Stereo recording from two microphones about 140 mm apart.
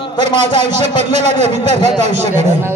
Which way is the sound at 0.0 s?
35° left (ahead or behind).